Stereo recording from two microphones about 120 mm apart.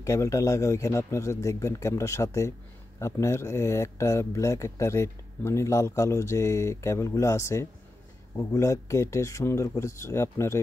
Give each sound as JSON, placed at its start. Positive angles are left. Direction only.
{"t": 0.0, "sound": "speech", "side_deg": 25}